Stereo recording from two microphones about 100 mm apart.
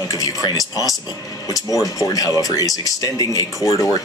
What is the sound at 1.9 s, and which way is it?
Speech, 35° left (ahead or behind).